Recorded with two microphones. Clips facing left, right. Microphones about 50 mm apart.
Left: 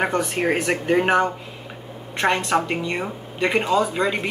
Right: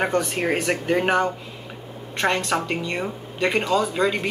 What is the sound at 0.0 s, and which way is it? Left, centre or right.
Speech, centre.